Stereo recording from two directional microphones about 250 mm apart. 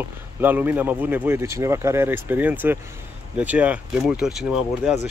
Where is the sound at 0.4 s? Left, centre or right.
Centre.